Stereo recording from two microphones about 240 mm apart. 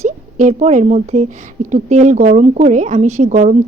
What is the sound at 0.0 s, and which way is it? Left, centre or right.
A woman's voice, right.